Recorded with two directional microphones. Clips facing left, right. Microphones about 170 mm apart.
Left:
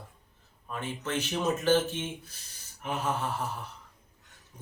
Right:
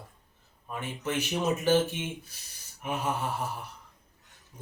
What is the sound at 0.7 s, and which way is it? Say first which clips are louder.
Speech: right 1 dB; 10° right (ahead or behind).